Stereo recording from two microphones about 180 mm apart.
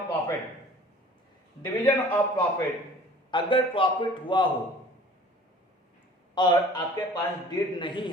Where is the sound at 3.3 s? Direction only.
30° left (ahead or behind).